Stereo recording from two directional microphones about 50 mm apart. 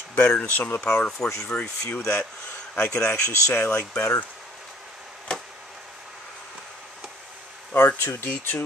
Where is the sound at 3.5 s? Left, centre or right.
Left.